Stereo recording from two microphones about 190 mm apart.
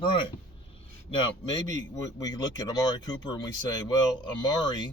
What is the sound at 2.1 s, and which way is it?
Speech, 20° left (ahead or behind).